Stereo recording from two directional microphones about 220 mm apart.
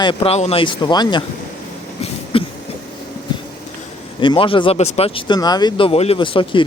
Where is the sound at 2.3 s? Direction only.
25° left (ahead or behind).